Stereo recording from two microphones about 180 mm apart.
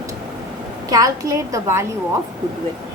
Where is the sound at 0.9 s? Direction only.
20° right (ahead or behind).